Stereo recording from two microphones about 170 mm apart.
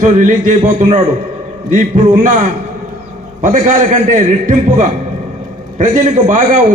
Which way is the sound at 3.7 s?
50° right (ahead or behind).